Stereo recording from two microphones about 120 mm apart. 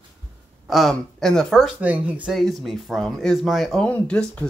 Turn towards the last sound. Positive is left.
turn(degrees=10)  # may be behind; listen again after turning